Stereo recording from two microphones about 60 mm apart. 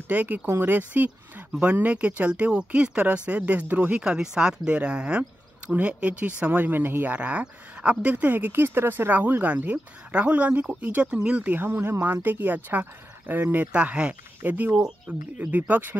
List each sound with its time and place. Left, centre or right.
0.1 s speech: right
4.0 s speech: centre; by 7.2 s right
7.2 s speech: right
11.5 s speech: right
13.7 s speech: centre
14.4 s speech: right